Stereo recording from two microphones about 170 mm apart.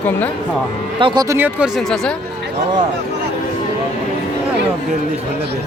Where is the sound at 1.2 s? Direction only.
15° right (ahead or behind).